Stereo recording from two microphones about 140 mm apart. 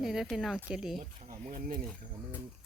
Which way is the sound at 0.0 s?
Centre (ahead or behind).